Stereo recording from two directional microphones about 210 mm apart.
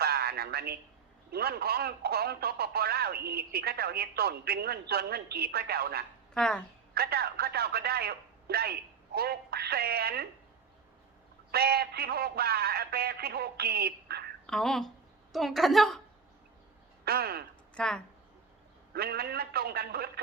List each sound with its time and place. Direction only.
0.0 s a sound: 50° right (ahead or behind)
1.3 s speech: 50° right (ahead or behind)
6.3 s speech: 5° left (ahead or behind)
6.9 s speech: 45° right (ahead or behind)
11.5 s speech: 50° right (ahead or behind)
14.4 s a woman's voice: 5° left (ahead or behind)
17.1 s speech: 50° right (ahead or behind)
17.7 s speech: 5° left (ahead or behind)
18.9 s speech: 50° right (ahead or behind)